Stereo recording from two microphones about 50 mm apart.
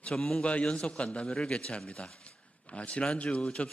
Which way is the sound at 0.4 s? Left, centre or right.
Left.